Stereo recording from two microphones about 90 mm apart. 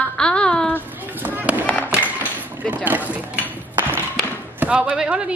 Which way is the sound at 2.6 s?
15° right (ahead or behind).